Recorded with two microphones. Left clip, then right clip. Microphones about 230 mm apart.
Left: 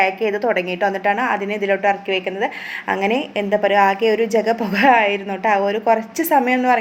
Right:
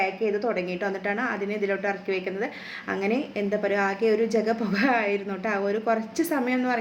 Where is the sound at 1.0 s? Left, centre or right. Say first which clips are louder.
Left 8 dB; centre.